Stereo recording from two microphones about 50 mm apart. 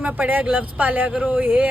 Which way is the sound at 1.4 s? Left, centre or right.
Right.